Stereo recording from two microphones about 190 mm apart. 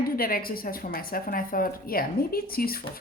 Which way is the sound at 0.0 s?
50° left (ahead or behind).